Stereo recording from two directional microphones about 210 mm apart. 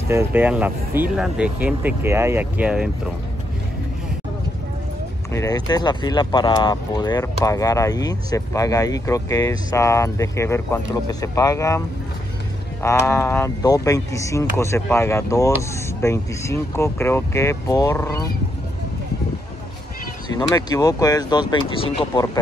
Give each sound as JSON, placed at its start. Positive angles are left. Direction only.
{"t": 0.1, "sound": "speech", "side_deg": -10}
{"t": 5.3, "sound": "speech", "side_deg": 15}
{"t": 12.8, "sound": "speech", "side_deg": 10}
{"t": 20.3, "sound": "speech", "side_deg": 15}